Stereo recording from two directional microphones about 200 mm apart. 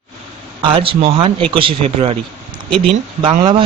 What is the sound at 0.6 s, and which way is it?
Speech, 25° right (ahead or behind).